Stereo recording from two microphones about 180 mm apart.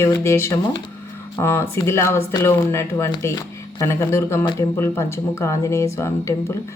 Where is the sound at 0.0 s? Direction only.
15° left (ahead or behind).